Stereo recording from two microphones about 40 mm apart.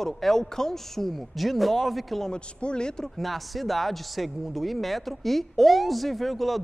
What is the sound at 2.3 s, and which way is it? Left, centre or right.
Speech, left.